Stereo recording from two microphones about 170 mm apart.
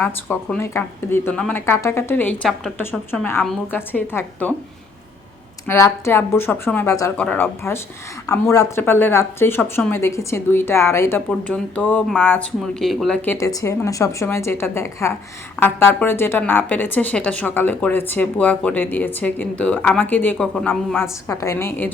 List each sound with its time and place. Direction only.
0.0 s speech: 10° left (ahead or behind)
3.4 s speech: centre (ahead or behind)
3.8 s speech: 15° left (ahead or behind)
5.6 s speech: 15° left (ahead or behind)
12.8 s speech: centre (ahead or behind)
13.2 s speech: 15° left (ahead or behind)